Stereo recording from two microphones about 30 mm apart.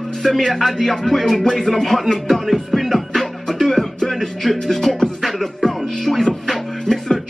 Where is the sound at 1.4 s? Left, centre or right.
Centre.